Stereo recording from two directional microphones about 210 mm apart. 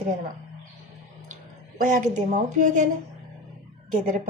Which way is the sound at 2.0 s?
40° right (ahead or behind).